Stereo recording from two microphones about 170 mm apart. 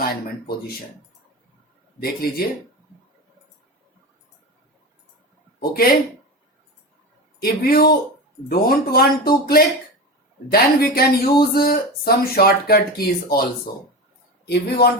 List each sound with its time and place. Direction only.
0.0 s speech: 60° left (ahead or behind)
2.0 s speech: 65° left (ahead or behind)
5.5 s speech: 60° left (ahead or behind)
7.4 s speech: 60° left (ahead or behind)
14.4 s speech: 75° left (ahead or behind)